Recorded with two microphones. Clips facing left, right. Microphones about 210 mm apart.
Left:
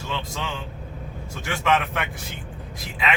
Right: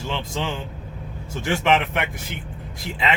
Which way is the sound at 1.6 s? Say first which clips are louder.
Right 1 dB; 25° right (ahead or behind).